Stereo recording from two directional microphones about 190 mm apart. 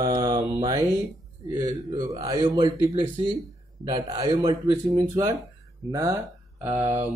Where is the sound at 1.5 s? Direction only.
20° right (ahead or behind).